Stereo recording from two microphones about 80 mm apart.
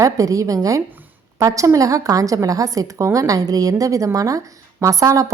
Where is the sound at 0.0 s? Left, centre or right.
Right.